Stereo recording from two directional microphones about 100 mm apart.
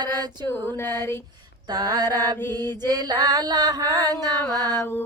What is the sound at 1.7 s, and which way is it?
Mantra, 40° right (ahead or behind).